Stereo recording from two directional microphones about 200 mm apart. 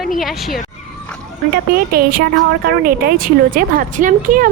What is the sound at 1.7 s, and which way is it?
Speech, 50° right (ahead or behind).